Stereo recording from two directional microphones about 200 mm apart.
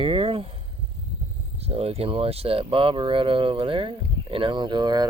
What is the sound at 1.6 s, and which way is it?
Speech, 30° right (ahead or behind).